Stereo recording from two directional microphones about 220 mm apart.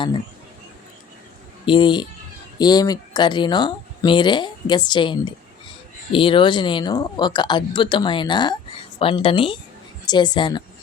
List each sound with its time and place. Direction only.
1.6 s speech: 20° left (ahead or behind)